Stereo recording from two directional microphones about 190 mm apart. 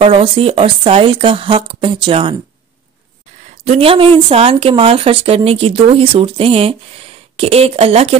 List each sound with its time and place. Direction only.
0.0 s speech: 30° right (ahead or behind)
3.6 s speech: 30° right (ahead or behind)